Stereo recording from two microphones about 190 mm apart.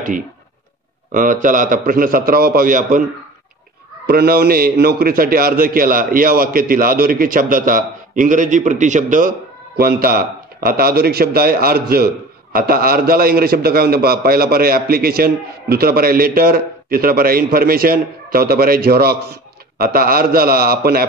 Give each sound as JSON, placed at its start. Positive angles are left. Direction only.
{"t": 1.1, "sound": "a man's voice", "side_deg": -45}
{"t": 4.0, "sound": "a man's voice", "side_deg": -55}